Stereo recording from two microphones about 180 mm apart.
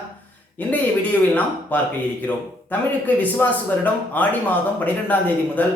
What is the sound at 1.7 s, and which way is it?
Speech, 10° left (ahead or behind).